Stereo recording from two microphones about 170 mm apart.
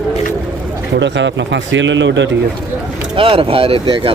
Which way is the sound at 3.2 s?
30° right (ahead or behind).